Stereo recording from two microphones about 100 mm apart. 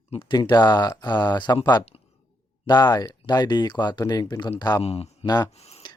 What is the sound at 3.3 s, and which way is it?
Speech, 45° left (ahead or behind).